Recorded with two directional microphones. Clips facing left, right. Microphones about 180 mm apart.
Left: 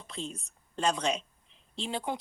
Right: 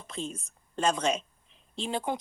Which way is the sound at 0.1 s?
50° right (ahead or behind).